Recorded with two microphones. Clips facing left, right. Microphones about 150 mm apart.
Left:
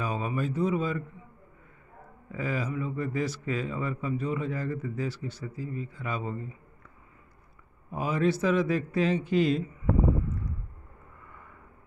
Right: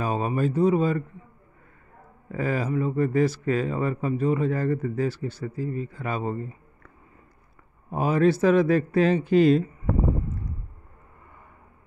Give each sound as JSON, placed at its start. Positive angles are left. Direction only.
{"t": 0.0, "sound": "a sound", "side_deg": -45}
{"t": 0.6, "sound": "a man's voice", "side_deg": -50}
{"t": 2.3, "sound": "a man's voice", "side_deg": -50}
{"t": 7.9, "sound": "a man's voice", "side_deg": -50}